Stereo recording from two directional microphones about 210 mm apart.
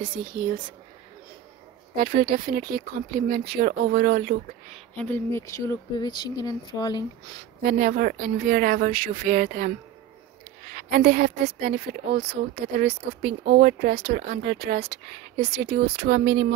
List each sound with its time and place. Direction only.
0.2 s speech: 20° right (ahead or behind)
2.0 s speech: 45° right (ahead or behind)
4.7 s speech: 5° left (ahead or behind)
7.6 s speech: 45° right (ahead or behind)
10.7 s speech: 40° right (ahead or behind)
12.2 s speech: 30° right (ahead or behind)
12.7 s speech: 55° right (ahead or behind)